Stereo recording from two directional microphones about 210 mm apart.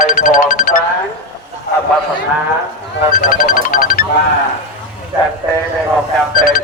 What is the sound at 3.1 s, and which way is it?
Music, 40° left (ahead or behind).